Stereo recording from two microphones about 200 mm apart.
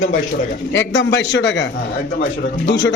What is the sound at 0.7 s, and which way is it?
A man's voice, 65° left (ahead or behind).